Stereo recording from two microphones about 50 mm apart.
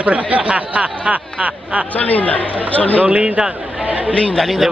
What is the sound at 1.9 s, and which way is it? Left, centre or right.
Speech, left.